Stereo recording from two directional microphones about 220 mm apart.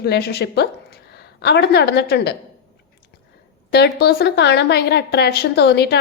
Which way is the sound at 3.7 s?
45° left (ahead or behind).